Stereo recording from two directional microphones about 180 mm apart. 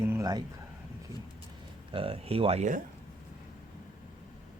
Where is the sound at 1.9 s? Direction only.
30° right (ahead or behind).